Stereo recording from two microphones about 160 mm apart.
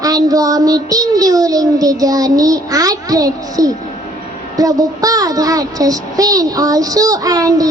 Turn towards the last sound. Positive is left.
turn(degrees=-20)  # may be behind; listen again after turning